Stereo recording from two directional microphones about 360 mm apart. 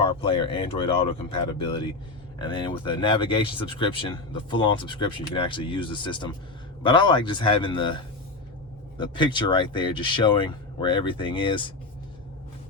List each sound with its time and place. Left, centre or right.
0.0 s speech: centre